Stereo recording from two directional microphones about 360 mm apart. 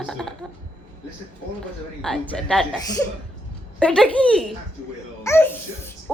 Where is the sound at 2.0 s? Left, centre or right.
Centre.